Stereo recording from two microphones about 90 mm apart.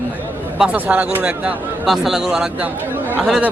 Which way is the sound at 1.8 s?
Centre (ahead or behind).